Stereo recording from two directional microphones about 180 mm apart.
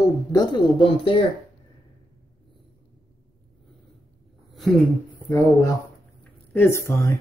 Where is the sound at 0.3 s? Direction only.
25° left (ahead or behind).